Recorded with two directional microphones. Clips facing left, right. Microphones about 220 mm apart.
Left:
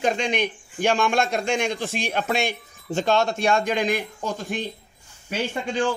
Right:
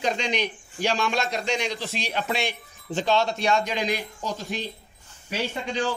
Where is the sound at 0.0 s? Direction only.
50° left (ahead or behind).